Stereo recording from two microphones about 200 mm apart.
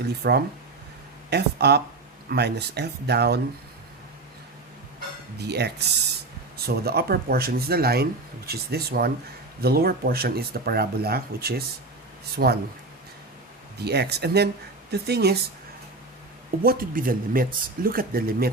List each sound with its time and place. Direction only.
0.0 s speech: 55° right (ahead or behind)
5.4 s speech: 55° right (ahead or behind)
13.7 s speech: 55° right (ahead or behind)
16.6 s speech: 45° right (ahead or behind)